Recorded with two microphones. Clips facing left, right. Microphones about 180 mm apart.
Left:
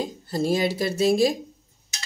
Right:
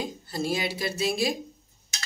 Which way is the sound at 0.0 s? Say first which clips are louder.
Left 5 dB; 45° left (ahead or behind).